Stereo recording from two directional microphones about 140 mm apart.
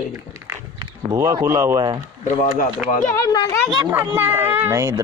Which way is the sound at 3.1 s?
25° left (ahead or behind).